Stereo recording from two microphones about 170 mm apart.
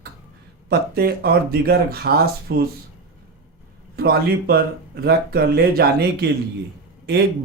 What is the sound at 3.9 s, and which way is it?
Speech, 65° right (ahead or behind).